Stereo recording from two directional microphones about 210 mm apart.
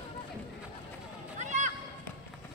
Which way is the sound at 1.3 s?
35° right (ahead or behind).